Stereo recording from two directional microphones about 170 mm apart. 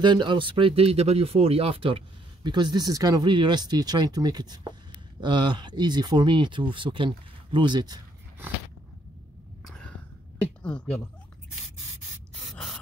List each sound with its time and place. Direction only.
0.0 s speech: 25° right (ahead or behind)
9.7 s cough: 5° left (ahead or behind)
12.5 s spray: 5° left (ahead or behind)